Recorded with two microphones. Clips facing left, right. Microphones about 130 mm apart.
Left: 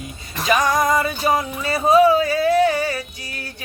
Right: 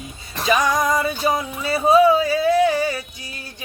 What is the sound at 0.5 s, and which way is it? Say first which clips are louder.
Music: left 1 dB; centre (ahead or behind).